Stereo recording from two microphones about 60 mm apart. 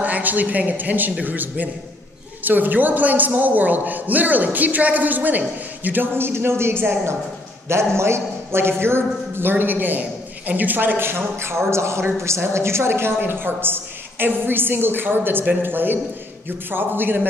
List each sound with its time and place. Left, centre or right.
0.0 s a man's voice: right